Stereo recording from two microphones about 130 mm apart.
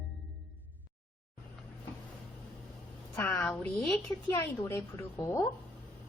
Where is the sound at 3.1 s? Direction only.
20° left (ahead or behind).